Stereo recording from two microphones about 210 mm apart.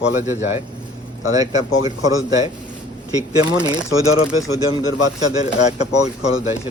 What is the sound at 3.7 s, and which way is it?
A man's voice, 20° right (ahead or behind).